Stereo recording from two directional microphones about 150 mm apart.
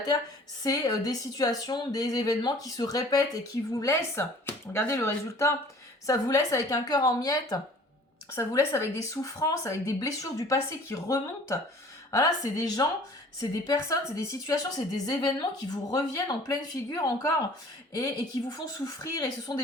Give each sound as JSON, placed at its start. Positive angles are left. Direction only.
{"t": 0.6, "sound": "a woman's voice", "side_deg": 25}